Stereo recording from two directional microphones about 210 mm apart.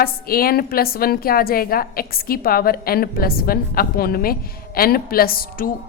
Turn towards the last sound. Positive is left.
turn(degrees=45)  # may be behind; listen again after turning